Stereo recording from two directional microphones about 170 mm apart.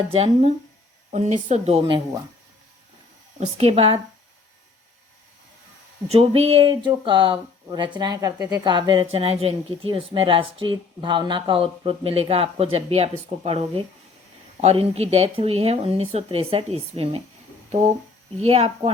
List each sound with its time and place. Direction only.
0.1 s a woman's voice: 35° right (ahead or behind)
3.4 s a woman's voice: 35° right (ahead or behind)
6.1 s a woman's voice: 35° right (ahead or behind)
18.3 s a woman's voice: 35° right (ahead or behind)